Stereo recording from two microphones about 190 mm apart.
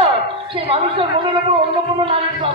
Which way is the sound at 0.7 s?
30° right (ahead or behind).